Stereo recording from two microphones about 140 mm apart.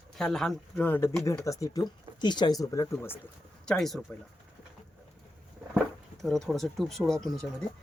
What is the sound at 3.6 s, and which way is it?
Speech, centre (ahead or behind).